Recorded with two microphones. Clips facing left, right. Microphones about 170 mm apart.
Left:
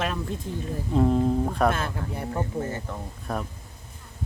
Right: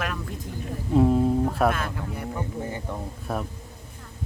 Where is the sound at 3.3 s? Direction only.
5° right (ahead or behind).